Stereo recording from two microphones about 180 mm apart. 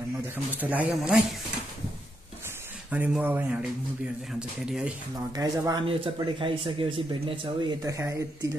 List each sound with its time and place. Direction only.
0.5 s speech: 10° right (ahead or behind)
2.9 s speech: 10° right (ahead or behind)
5.3 s speech: 20° right (ahead or behind)
7.8 s speech: 20° right (ahead or behind)